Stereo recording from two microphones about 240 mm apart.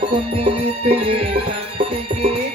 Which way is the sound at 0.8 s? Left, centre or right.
Right.